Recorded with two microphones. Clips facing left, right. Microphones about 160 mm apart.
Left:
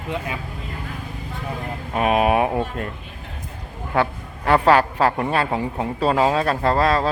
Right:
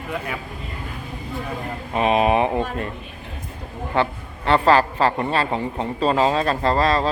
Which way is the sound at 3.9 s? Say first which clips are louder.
Left 1 dB; 5° left (ahead or behind).